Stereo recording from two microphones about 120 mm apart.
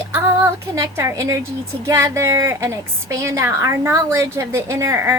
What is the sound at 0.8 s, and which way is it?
A woman's voice, 25° right (ahead or behind).